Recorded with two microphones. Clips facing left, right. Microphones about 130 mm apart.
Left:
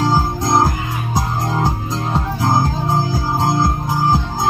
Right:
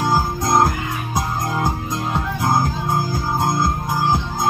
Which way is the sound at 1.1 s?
25° left (ahead or behind).